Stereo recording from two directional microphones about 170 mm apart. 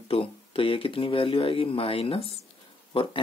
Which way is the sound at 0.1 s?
35° left (ahead or behind).